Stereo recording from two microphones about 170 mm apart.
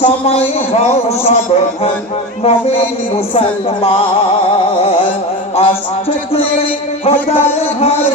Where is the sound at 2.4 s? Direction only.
35° left (ahead or behind).